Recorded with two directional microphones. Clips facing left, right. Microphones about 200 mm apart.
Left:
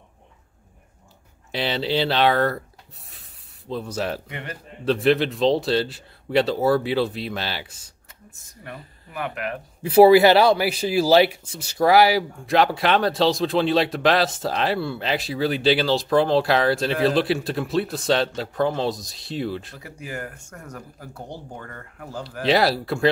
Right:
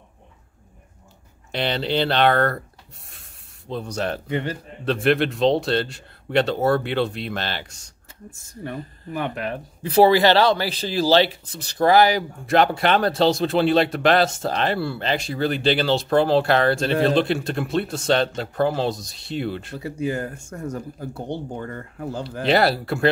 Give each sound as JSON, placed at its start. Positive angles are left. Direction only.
{"t": 1.5, "sound": "speech", "side_deg": 0}
{"t": 3.1, "sound": "spray", "side_deg": 0}
{"t": 4.3, "sound": "speech", "side_deg": -30}
{"t": 4.8, "sound": "speech", "side_deg": 0}
{"t": 8.3, "sound": "speech", "side_deg": -30}
{"t": 9.8, "sound": "speech", "side_deg": 10}
{"t": 19.8, "sound": "speech", "side_deg": -25}
{"t": 22.4, "sound": "speech", "side_deg": 0}